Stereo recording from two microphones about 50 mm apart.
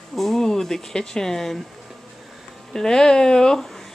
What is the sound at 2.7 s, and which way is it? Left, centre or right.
Speech, centre.